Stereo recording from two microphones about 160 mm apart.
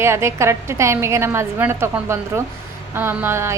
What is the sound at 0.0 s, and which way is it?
A woman's voice, 15° right (ahead or behind).